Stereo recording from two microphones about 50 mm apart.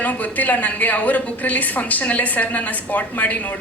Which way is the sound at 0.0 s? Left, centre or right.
Left.